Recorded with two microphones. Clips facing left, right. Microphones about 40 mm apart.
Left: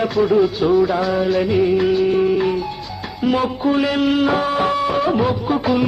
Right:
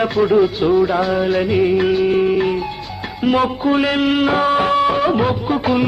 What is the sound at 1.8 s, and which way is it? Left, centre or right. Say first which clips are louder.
Music of bollywood: right 1 dB; right.